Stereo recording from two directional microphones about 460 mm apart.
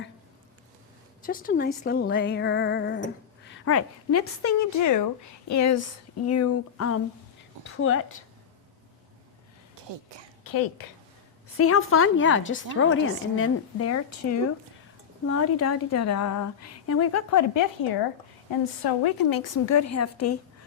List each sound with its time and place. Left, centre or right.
1.2 s a woman's voice: centre
10.4 s a woman's voice: left
11.5 s a woman's voice: left